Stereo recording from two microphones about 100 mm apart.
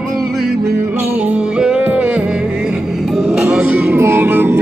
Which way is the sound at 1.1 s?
15° right (ahead or behind).